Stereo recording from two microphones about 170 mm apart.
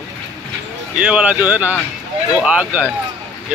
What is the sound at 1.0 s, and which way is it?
Speech, 5° right (ahead or behind).